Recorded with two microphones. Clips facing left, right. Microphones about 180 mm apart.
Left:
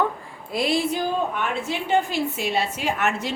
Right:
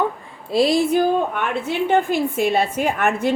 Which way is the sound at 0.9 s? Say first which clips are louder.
Right 6 dB; 55° right (ahead or behind).